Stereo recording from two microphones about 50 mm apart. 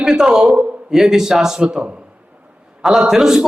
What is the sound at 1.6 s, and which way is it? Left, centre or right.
Speech, right.